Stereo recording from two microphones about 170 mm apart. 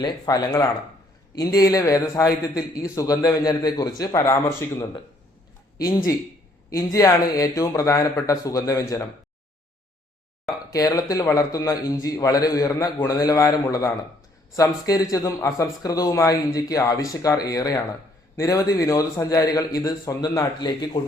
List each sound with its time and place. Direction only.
0.0 s a man's voice: 20° left (ahead or behind)
10.7 s a man's voice: 20° left (ahead or behind)